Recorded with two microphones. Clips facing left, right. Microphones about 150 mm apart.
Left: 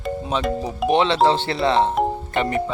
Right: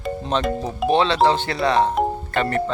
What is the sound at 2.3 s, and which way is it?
Music, 15° left (ahead or behind).